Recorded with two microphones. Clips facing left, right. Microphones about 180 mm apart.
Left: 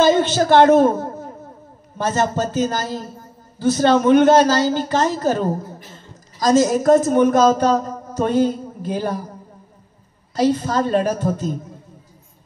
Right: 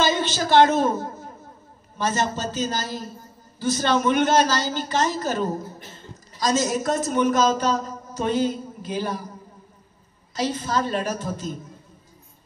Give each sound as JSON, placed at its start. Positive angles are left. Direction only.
{"t": 0.0, "sound": "a man's voice", "side_deg": 50}
{"t": 10.3, "sound": "speech", "side_deg": 50}